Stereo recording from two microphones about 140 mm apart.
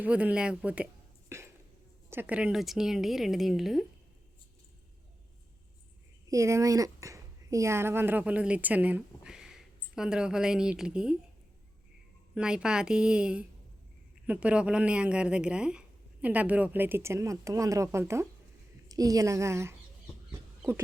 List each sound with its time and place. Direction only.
0.0 s speech: 10° right (ahead or behind)
1.3 s a sound: 20° right (ahead or behind)
2.0 s a woman's voice: 15° right (ahead or behind)
6.2 s speech: 20° right (ahead or behind)
12.3 s a woman's voice: 5° right (ahead or behind)
20.6 s a sound: 15° right (ahead or behind)